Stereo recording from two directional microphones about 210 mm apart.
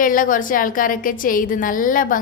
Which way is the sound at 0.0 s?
40° left (ahead or behind).